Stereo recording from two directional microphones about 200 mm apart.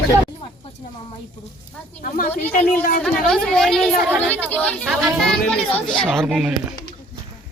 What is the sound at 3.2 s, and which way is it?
Speech, 5° left (ahead or behind).